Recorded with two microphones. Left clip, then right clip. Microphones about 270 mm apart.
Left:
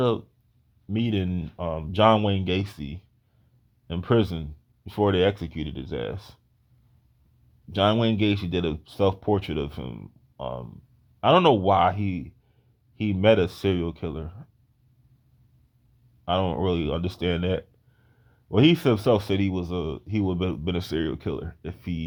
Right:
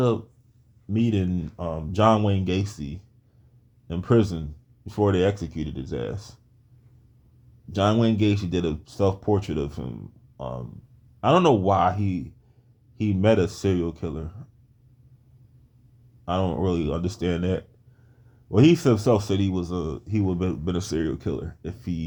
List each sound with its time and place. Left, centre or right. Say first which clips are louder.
0.9 s speech: right 2 dB; left
7.7 s speech: even; left
16.2 s speech: left 1 dB; left